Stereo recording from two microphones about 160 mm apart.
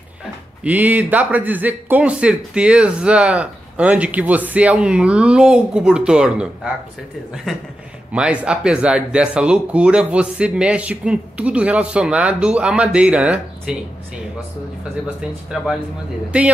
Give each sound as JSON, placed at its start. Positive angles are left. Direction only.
{"t": 0.7, "sound": "speech", "side_deg": -10}
{"t": 8.1, "sound": "speech", "side_deg": -5}
{"t": 15.5, "sound": "speech", "side_deg": -5}